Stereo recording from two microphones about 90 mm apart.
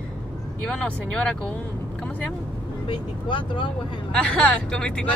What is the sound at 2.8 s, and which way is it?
Speech, 65° left (ahead or behind).